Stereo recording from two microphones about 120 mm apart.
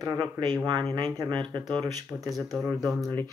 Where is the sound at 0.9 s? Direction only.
40° right (ahead or behind).